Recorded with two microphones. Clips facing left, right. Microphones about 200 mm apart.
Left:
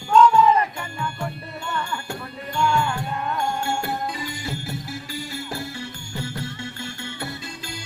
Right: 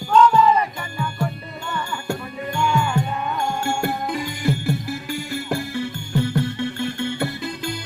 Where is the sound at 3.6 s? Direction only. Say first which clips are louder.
Right 3 dB; 50° right (ahead or behind).